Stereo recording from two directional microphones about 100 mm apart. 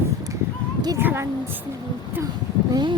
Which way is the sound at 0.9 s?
25° right (ahead or behind).